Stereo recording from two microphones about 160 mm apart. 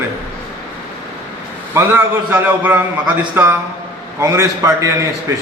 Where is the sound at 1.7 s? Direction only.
15° right (ahead or behind).